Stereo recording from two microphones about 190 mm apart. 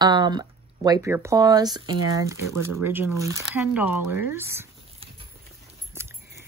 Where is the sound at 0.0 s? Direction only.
25° right (ahead or behind).